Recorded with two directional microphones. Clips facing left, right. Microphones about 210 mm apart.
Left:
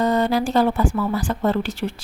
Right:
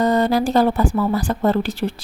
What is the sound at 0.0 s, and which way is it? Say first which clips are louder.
Speech: right 2 dB; 40° right (ahead or behind).